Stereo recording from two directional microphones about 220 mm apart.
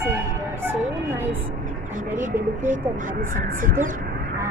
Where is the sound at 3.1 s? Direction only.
35° right (ahead or behind).